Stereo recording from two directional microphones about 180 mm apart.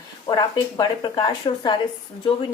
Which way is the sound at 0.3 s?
20° left (ahead or behind).